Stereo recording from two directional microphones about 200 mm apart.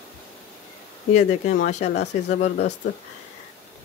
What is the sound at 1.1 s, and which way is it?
Speech, 35° left (ahead or behind).